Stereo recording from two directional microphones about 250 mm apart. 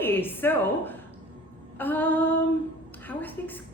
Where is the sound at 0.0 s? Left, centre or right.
Centre.